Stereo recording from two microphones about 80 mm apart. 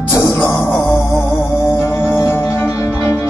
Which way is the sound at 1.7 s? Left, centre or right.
Left.